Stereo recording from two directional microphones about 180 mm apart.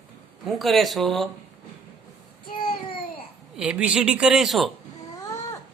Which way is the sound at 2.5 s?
30° left (ahead or behind).